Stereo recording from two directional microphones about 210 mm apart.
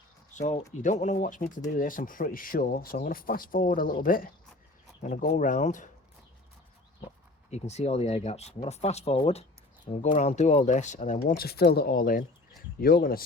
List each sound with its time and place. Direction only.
0.3 s speech: 35° left (ahead or behind)
7.5 s speech: 30° left (ahead or behind)